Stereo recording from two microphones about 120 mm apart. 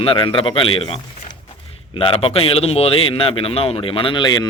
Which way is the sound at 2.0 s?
50° left (ahead or behind).